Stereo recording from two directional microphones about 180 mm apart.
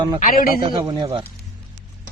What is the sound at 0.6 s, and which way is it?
Speech, 25° right (ahead or behind).